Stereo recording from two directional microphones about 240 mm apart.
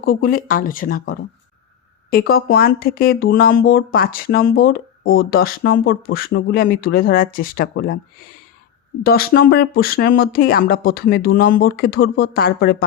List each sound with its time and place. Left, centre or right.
0.0 s speech: left
9.0 s speech: left